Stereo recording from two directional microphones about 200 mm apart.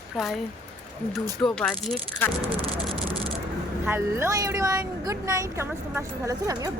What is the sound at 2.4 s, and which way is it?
Vehicle, 30° right (ahead or behind).